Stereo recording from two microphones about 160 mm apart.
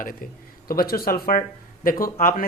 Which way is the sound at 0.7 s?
70° left (ahead or behind).